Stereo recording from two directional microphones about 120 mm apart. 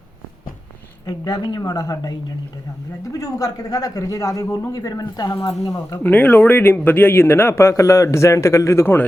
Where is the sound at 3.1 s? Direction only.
30° left (ahead or behind).